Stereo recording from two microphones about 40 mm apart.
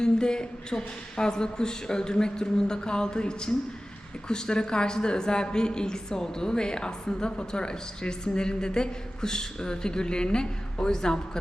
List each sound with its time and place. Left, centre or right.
0.0 s speech: centre